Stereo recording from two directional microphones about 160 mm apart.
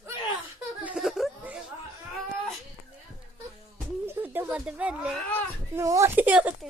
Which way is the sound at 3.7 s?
15° right (ahead or behind).